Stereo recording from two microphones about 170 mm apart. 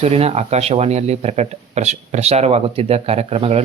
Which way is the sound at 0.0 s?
35° right (ahead or behind).